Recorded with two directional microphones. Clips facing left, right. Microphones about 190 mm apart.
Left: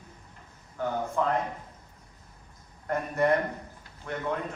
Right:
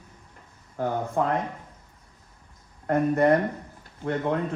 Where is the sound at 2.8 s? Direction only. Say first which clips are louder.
Right 5 dB; 50° right (ahead or behind).